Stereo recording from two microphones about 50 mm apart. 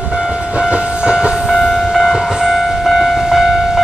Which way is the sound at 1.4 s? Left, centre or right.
Centre.